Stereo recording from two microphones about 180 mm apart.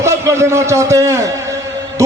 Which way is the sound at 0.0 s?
15° right (ahead or behind).